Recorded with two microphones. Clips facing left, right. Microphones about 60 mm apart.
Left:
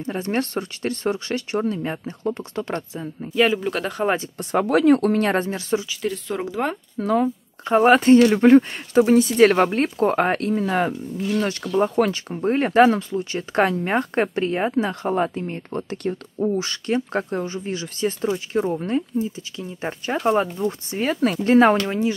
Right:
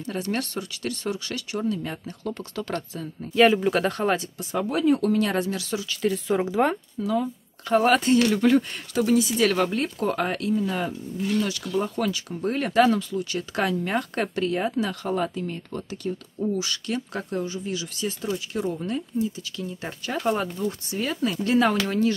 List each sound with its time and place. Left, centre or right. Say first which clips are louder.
0.0 s speech: left 4 dB; left
3.3 s speech: right 1 dB; centre
4.4 s speech: left 6 dB; left
4.6 s speech: left 5 dB; left
5.9 s speech: right 2 dB; centre
7.0 s speech: left 6 dB; left
7.6 s speech: left 5 dB; left
12.4 s speech: left 5 dB; left
21.8 s speech: left 1 dB; centre